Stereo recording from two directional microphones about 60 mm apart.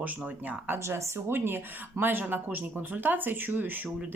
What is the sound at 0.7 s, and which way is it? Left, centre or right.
Speech, right.